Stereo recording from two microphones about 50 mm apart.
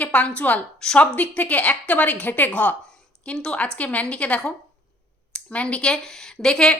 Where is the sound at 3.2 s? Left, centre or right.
Left.